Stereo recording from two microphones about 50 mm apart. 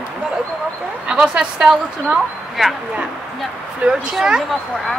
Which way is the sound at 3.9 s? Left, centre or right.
Centre.